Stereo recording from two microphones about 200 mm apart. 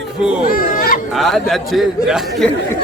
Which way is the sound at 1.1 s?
Centre (ahead or behind).